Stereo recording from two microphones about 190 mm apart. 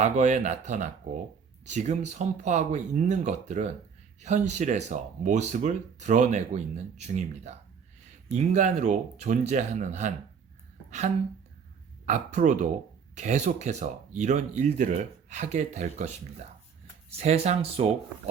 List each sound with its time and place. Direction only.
0.0 s speech: 40° right (ahead or behind)
10.8 s a sound: 35° right (ahead or behind)
12.0 s speech: 40° right (ahead or behind)